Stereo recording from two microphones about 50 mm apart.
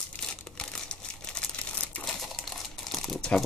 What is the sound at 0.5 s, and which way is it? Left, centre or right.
Crumpling, centre.